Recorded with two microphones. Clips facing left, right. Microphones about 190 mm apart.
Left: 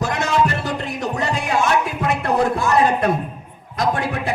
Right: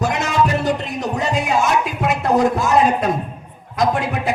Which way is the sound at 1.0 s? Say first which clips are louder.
Even; 65° left (ahead or behind).